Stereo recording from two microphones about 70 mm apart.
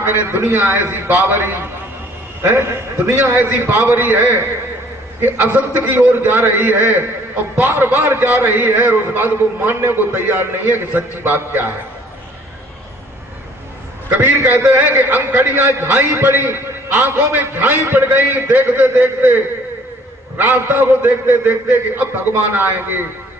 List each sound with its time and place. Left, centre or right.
0.0 s a man's voice: right
14.1 s a man's voice: right
20.4 s a man's voice: right